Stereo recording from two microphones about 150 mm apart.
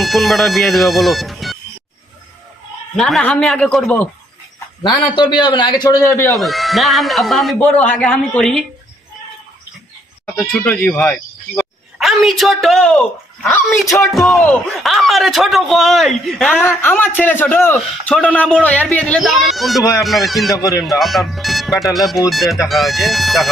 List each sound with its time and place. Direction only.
0.0 s speech: centre (ahead or behind)
3.0 s speech: 5° left (ahead or behind)
4.8 s a man's voice: 30° left (ahead or behind)
6.0 s a man's voice: 15° left (ahead or behind)
6.3 s speech: centre (ahead or behind)
10.6 s speech: 10° left (ahead or behind)
20.5 s speech: 25° left (ahead or behind)
20.8 s speech: centre (ahead or behind)